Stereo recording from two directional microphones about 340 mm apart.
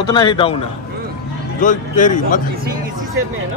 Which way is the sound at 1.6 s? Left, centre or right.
Left.